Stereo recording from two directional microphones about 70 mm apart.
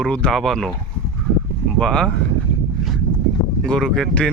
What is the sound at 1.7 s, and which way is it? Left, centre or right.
Speech, centre.